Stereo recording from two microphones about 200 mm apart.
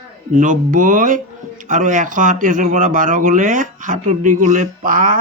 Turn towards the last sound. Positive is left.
turn(degrees=-40)  # may be behind; listen again after turning